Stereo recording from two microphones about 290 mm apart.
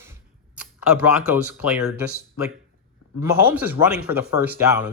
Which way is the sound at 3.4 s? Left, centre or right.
Centre.